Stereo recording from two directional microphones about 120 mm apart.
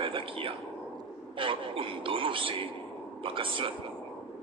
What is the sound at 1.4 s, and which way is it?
A man's voice, 45° right (ahead or behind).